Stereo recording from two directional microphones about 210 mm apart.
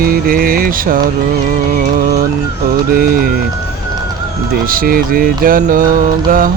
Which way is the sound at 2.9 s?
45° right (ahead or behind).